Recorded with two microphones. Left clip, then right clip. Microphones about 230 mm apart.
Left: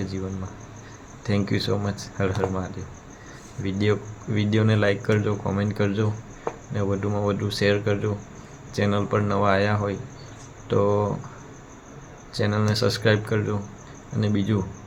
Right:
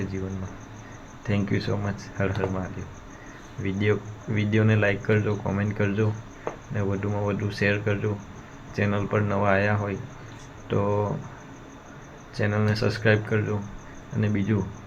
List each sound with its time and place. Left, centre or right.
1.3 s speech: centre
3.6 s speech: centre
12.3 s speech: centre